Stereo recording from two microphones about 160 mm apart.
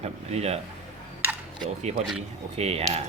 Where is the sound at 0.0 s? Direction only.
40° right (ahead or behind).